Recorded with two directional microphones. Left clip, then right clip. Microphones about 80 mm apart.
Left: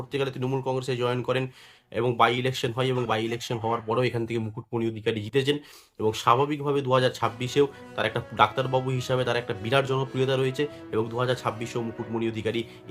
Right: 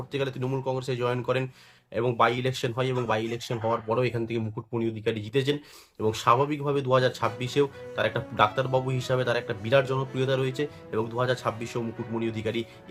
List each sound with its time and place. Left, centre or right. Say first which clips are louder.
0.1 s speech: left 2 dB; left